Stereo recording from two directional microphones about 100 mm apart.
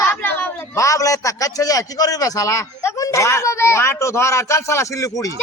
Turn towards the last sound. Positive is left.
turn(degrees=35)  # may be behind; listen again after turning